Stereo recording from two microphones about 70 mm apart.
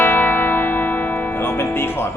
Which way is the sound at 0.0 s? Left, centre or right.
Left.